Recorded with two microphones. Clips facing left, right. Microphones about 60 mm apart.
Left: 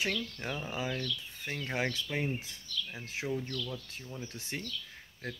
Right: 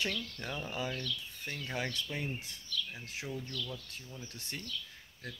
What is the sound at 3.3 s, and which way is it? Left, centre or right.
Speech, left.